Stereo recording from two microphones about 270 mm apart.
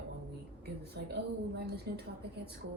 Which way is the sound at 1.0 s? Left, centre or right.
Right.